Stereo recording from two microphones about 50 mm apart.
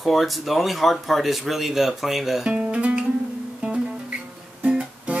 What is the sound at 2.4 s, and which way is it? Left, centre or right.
Speech, right.